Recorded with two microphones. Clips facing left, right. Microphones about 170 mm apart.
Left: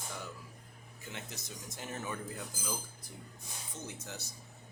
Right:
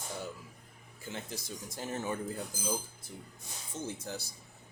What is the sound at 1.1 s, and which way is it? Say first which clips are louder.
Speech: right 5 dB; 30° right (ahead or behind).